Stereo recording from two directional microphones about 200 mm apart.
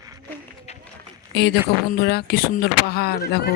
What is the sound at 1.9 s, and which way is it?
Speech, 55° left (ahead or behind).